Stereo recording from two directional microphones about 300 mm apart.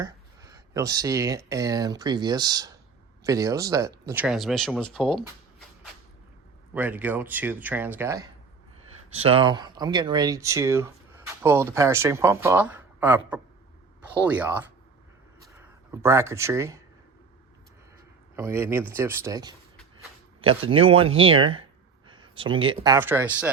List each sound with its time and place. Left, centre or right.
0.0 s speech: centre
6.7 s speech: centre
15.9 s speech: centre
18.3 s speech: centre